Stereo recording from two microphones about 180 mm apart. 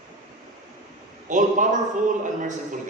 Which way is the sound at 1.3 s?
45° right (ahead or behind).